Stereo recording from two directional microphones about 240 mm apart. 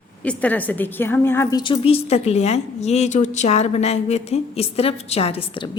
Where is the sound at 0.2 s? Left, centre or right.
Centre.